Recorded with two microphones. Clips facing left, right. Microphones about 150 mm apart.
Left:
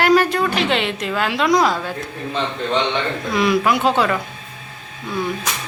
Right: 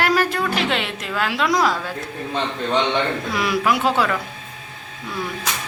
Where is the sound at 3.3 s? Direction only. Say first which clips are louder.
Left 5 dB; 5° right (ahead or behind).